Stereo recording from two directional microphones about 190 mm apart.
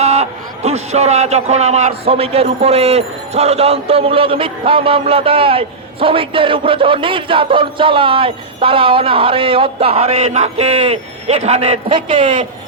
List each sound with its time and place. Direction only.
0.0 s a man's voice: 35° right (ahead or behind)